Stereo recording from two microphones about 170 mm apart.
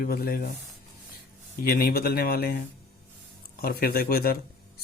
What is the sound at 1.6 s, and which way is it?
Speech, 65° left (ahead or behind).